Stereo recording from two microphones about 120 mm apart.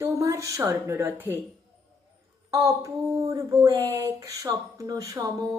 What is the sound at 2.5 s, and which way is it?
Speech, 25° right (ahead or behind).